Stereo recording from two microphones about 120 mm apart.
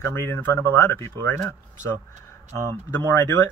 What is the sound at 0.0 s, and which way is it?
Speech, 20° left (ahead or behind).